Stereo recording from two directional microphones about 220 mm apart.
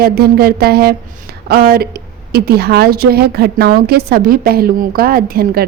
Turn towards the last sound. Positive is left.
turn(degrees=-45)  # may be behind; listen again after turning